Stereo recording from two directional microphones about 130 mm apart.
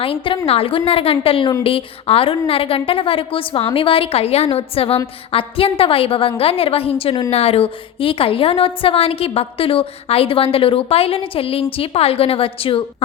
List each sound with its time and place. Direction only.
0.0 s a woman's voice: 45° left (ahead or behind)